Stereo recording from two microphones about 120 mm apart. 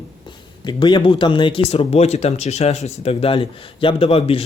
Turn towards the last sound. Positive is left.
turn(degrees=55)  # may be behind; listen again after turning